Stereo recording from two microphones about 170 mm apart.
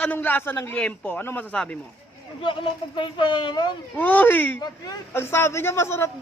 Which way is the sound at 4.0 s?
10° left (ahead or behind).